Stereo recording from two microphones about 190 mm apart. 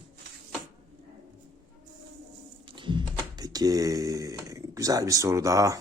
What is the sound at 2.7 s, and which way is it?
Typing, 25° right (ahead or behind).